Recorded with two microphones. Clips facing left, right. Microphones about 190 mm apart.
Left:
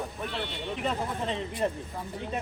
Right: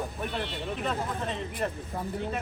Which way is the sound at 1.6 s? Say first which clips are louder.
Left 3 dB; 15° left (ahead or behind).